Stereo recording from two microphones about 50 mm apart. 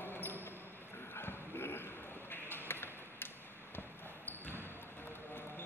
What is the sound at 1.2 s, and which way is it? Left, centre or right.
Clip-clop, left.